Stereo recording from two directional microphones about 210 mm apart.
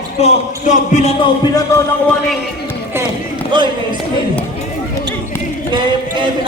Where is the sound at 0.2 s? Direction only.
35° left (ahead or behind).